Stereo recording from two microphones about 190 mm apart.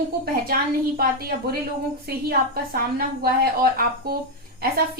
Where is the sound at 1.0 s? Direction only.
50° right (ahead or behind).